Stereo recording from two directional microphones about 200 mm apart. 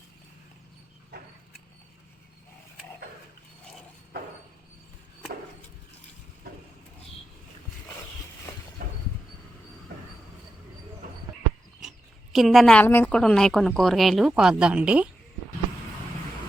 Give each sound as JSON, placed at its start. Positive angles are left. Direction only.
{"t": 11.8, "sound": "a woman's voice", "side_deg": 0}